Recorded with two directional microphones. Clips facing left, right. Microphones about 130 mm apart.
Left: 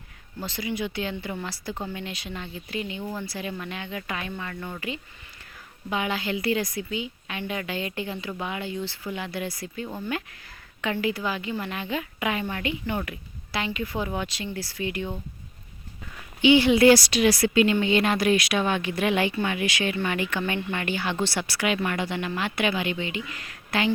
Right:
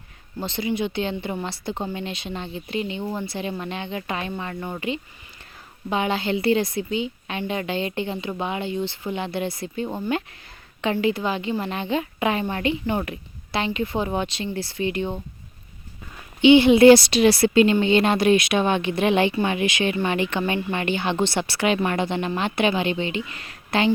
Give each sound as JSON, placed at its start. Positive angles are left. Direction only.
{"t": 0.3, "sound": "a woman's voice", "side_deg": -25}
{"t": 16.4, "sound": "a woman's voice", "side_deg": -25}